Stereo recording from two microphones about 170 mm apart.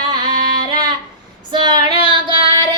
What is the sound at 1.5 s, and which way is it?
Female singing, 25° right (ahead or behind).